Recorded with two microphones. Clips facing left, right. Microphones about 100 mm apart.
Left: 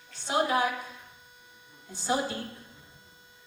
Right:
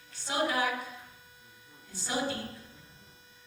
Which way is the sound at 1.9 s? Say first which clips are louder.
Left 4 dB; 20° left (ahead or behind).